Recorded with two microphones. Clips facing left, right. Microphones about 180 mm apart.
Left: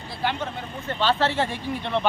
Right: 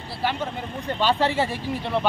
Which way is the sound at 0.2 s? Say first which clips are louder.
Right 1 dB; 5° right (ahead or behind).